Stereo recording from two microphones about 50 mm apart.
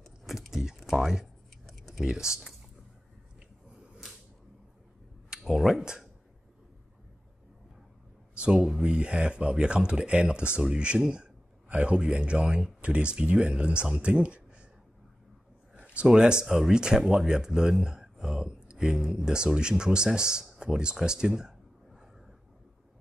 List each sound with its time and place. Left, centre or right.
0.3 s a sound: centre
1.2 s a sound: centre
2.0 s speech: centre
3.7 s whip: centre
5.3 s speech: centre
8.5 s speech: centre
15.7 s a sound: right
16.1 s speech: centre
16.4 s speech: centre
16.7 s speech: centre